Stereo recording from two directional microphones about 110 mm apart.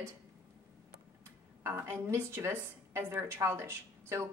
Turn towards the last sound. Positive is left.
turn(degrees=-25)  # may be behind; listen again after turning